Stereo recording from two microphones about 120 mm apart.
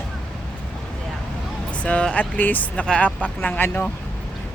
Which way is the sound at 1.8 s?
10° left (ahead or behind).